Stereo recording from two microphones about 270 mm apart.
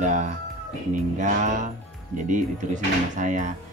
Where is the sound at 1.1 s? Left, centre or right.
Right.